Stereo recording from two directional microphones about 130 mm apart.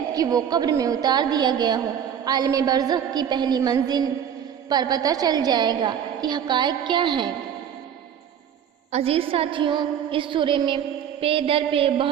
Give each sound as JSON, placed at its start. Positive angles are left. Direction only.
{"t": 0.1, "sound": "a woman's voice", "side_deg": -30}
{"t": 8.9, "sound": "a woman's voice", "side_deg": -50}
{"t": 11.2, "sound": "a sound", "side_deg": -45}